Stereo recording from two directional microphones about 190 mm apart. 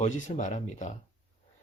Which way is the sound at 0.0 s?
40° left (ahead or behind).